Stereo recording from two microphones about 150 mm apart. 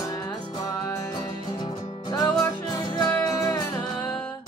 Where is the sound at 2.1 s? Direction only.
25° left (ahead or behind).